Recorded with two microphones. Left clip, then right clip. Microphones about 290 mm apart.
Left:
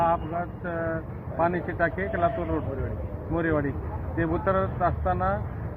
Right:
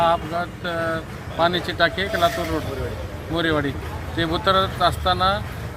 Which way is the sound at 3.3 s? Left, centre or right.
Right.